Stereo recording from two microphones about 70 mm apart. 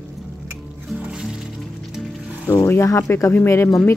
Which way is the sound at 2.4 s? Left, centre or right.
Left.